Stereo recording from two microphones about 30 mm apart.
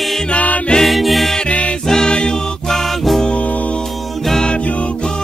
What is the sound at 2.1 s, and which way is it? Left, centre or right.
Music, left.